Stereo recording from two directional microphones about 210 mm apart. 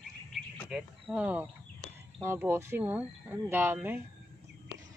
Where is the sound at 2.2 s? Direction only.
10° right (ahead or behind).